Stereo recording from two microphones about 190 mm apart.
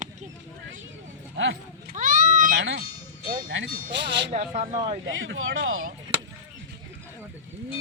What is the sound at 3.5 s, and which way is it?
Music, 75° right (ahead or behind).